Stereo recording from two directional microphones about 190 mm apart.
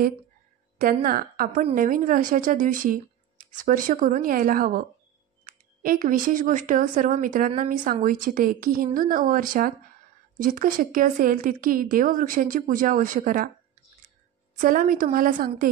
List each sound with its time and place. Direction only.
1.0 s speech: 50° right (ahead or behind)
14.6 s speech: 45° right (ahead or behind)